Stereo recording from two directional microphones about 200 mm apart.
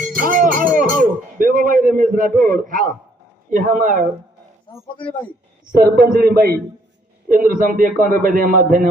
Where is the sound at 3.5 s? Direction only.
40° right (ahead or behind).